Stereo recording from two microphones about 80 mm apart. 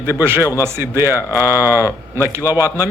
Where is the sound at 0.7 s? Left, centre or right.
Right.